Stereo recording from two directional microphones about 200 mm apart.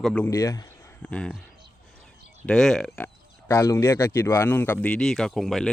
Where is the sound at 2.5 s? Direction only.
Centre (ahead or behind).